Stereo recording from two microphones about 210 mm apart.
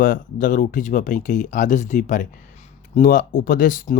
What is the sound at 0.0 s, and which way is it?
Speech, 40° left (ahead or behind).